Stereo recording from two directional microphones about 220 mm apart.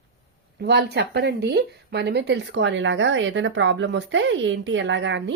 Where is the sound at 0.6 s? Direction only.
50° right (ahead or behind).